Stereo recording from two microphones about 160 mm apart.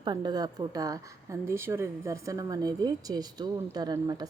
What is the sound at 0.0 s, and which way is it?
A woman's voice, 25° right (ahead or behind).